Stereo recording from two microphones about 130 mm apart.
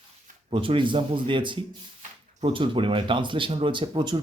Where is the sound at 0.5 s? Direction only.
40° right (ahead or behind).